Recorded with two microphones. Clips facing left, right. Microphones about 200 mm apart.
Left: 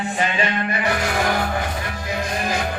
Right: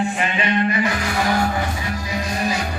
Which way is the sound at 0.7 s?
65° left (ahead or behind).